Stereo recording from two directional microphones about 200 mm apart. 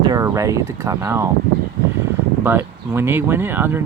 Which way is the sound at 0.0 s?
15° right (ahead or behind).